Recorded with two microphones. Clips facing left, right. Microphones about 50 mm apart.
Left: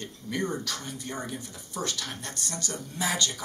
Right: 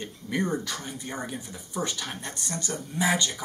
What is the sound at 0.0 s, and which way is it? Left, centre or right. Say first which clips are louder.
Speech: right 2 dB; right.